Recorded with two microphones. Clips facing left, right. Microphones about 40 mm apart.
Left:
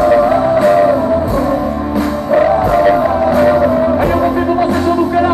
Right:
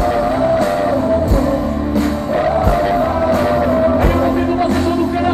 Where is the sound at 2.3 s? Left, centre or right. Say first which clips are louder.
Left 5 dB; left.